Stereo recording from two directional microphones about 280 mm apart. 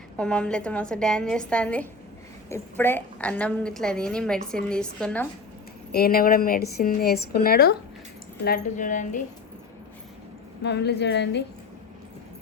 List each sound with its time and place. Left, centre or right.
0.2 s a woman's voice: centre
5.9 s speech: left
10.6 s speech: left